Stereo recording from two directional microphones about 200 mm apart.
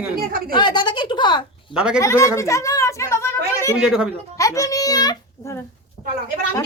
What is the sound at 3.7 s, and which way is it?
Speech, 5° right (ahead or behind).